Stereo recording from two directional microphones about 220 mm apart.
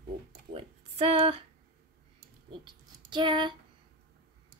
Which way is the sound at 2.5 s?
20° right (ahead or behind).